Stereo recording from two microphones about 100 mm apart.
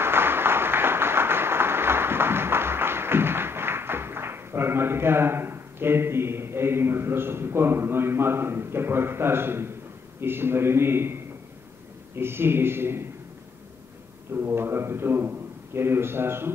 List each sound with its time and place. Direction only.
0.0 s a sound: 25° right (ahead or behind)
10.2 s a man's voice: 25° right (ahead or behind)
12.2 s a man's voice: 25° right (ahead or behind)
14.3 s a man's voice: 25° right (ahead or behind)